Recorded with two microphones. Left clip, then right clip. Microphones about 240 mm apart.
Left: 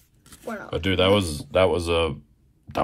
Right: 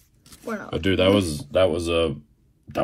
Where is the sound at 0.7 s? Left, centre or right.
Centre.